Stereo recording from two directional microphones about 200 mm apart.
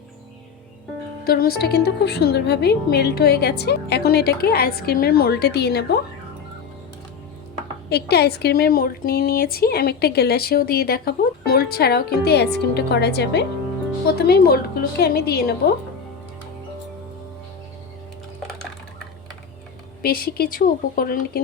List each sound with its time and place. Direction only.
1.2 s a woman's voice: 50° left (ahead or behind)
7.9 s a woman's voice: 55° left (ahead or behind)
20.0 s a woman's voice: 45° left (ahead or behind)